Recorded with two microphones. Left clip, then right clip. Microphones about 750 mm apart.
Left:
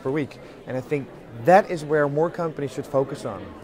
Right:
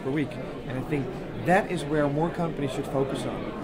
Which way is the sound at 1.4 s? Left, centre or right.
Left.